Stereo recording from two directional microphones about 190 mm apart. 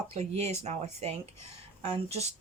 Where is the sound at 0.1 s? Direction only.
35° right (ahead or behind).